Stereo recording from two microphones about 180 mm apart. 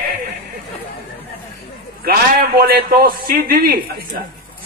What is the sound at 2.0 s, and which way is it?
A man's voice, 55° right (ahead or behind).